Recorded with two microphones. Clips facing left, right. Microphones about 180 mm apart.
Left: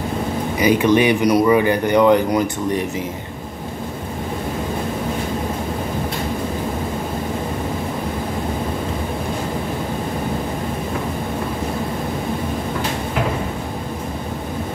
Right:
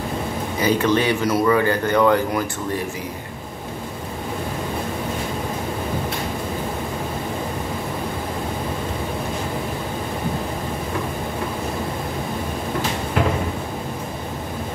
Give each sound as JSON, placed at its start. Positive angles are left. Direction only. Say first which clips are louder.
{"t": 0.6, "sound": "speech", "louder": "left 4 dB", "side_deg": 15}